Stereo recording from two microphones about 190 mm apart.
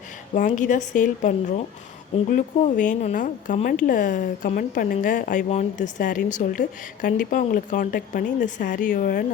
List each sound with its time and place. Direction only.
0.3 s a woman's voice: 40° left (ahead or behind)